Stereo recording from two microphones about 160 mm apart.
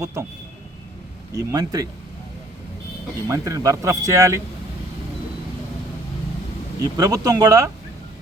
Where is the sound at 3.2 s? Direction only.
20° right (ahead or behind).